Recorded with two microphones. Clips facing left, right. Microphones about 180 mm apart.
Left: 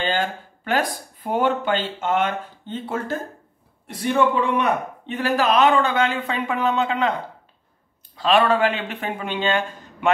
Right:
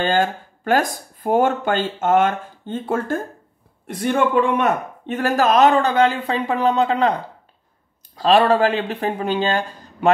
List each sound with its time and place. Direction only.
0.0 s a man's voice: 45° right (ahead or behind)
8.2 s a man's voice: 35° right (ahead or behind)